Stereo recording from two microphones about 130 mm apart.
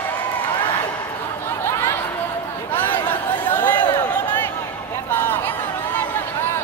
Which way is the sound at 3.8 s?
30° left (ahead or behind).